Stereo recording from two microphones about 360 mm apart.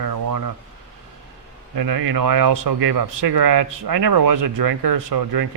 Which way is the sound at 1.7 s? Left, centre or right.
Right.